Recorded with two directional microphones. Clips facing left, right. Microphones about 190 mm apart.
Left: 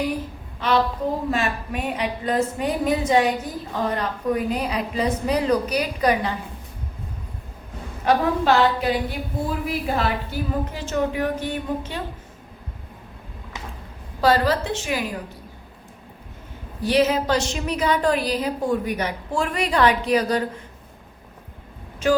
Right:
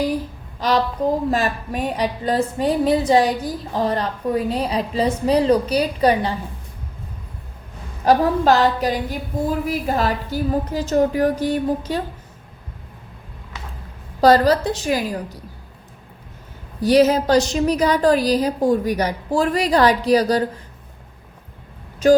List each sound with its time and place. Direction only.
0.6 s a woman's voice: 40° right (ahead or behind)
8.0 s a woman's voice: 40° right (ahead or behind)
14.2 s a woman's voice: 40° right (ahead or behind)
16.8 s a woman's voice: 40° right (ahead or behind)
22.0 s a woman's voice: 40° right (ahead or behind)